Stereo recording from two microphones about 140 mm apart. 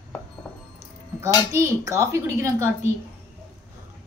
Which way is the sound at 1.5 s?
20° right (ahead or behind).